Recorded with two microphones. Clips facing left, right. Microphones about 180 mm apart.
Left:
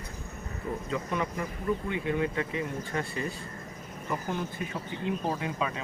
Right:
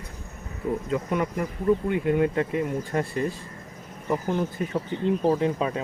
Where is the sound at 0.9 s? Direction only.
55° right (ahead or behind).